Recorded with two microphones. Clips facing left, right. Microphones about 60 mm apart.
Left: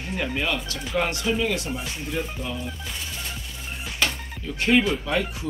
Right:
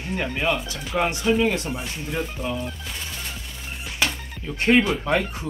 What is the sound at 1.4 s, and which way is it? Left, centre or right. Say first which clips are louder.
Speech: right 3 dB; right.